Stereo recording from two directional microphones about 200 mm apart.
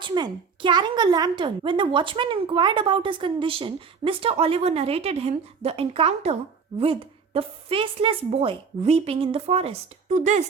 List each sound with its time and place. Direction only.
0.0 s a woman's voice: 25° right (ahead or behind)